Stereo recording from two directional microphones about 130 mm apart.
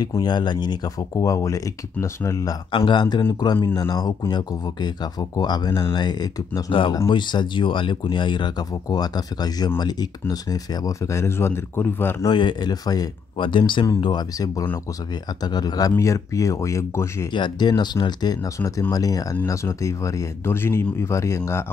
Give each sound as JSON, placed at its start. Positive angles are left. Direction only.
{"t": 0.0, "sound": "speech", "side_deg": 30}
{"t": 2.7, "sound": "speech", "side_deg": 40}
{"t": 12.3, "sound": "speech", "side_deg": 35}
{"t": 17.3, "sound": "speech", "side_deg": 35}